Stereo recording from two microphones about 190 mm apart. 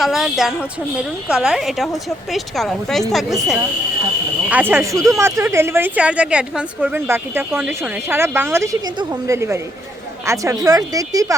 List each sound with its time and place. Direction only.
0.0 s a woman's voice: centre (ahead or behind); by 11.3 s 20° right (ahead or behind)